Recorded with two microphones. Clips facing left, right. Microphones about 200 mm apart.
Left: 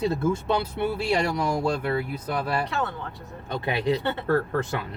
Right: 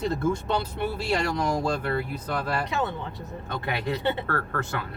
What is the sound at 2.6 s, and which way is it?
Speech, 20° right (ahead or behind).